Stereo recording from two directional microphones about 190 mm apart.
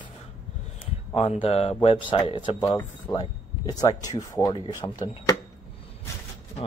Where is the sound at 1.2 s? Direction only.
30° left (ahead or behind).